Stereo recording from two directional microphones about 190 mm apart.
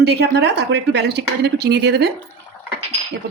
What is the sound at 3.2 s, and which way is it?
Speech, 60° right (ahead or behind).